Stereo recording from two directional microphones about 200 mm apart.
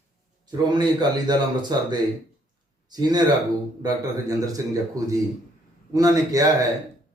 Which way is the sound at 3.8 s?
20° right (ahead or behind).